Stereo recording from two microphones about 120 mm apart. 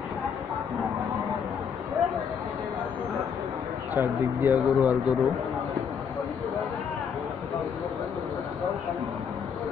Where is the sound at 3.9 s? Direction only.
15° right (ahead or behind).